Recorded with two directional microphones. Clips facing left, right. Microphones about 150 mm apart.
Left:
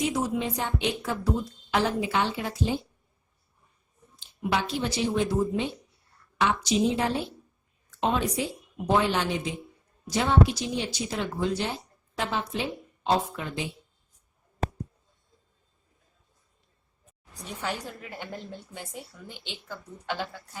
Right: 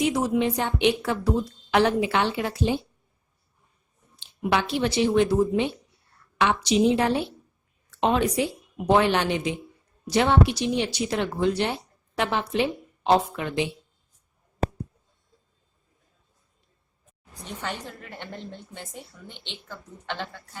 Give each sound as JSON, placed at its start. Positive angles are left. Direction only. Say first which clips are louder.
{"t": 0.3, "sound": "a woman's voice", "louder": "right 5 dB", "side_deg": -65}
{"t": 4.2, "sound": "a woman's voice", "louder": "right 3 dB", "side_deg": -65}
{"t": 17.4, "sound": "a woman's voice", "louder": "even", "side_deg": 10}